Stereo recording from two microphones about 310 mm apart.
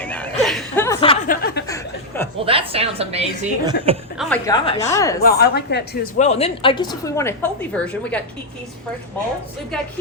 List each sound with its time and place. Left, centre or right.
0.0 s chuckle: centre
1.0 s a sound: left
1.6 s chuckle: centre
2.4 s a woman's voice: centre
4.2 s a woman's voice: centre
5.2 s a woman's voice: left; by 8.3 s centre